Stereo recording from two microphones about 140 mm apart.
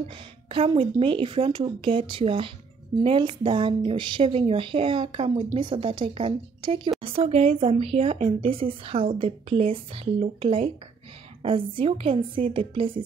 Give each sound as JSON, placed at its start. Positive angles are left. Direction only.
{"t": 0.5, "sound": "speech", "side_deg": -40}